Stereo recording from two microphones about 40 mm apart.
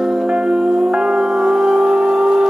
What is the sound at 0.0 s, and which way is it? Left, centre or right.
Music, right.